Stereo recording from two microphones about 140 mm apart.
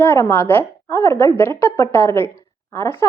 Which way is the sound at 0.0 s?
15° left (ahead or behind).